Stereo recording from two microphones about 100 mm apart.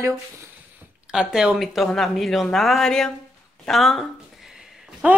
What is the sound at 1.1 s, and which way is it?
A woman's voice, 5° right (ahead or behind).